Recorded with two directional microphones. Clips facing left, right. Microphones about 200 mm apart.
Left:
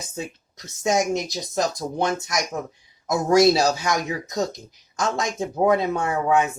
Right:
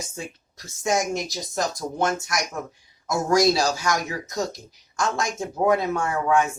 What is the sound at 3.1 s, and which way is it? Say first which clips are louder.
Speech: left 3 dB; 20° left (ahead or behind).